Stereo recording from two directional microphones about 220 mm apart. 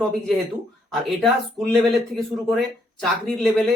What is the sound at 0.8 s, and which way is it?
Speech, centre (ahead or behind).